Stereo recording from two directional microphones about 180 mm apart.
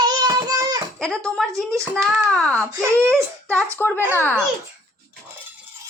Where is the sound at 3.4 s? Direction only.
10° left (ahead or behind).